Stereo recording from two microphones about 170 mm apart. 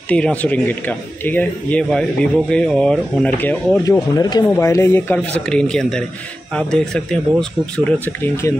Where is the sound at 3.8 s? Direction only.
20° left (ahead or behind).